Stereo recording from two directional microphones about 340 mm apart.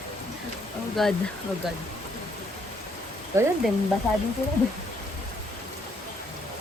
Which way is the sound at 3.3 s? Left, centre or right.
Centre.